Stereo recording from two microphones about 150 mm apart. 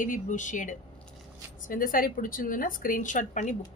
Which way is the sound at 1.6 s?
70° left (ahead or behind).